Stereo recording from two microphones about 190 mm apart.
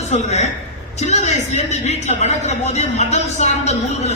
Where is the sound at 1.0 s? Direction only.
35° left (ahead or behind).